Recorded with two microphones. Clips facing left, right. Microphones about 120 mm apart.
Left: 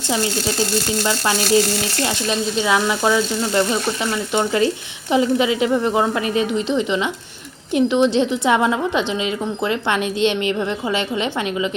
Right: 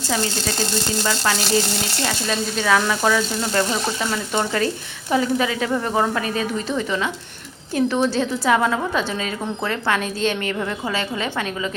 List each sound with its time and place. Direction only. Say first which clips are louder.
1.0 s a woman's voice: left 2 dB; 20° left (ahead or behind)
2.6 s a woman's voice: even; 15° left (ahead or behind)